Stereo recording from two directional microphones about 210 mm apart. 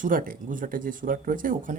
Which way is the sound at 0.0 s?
40° right (ahead or behind).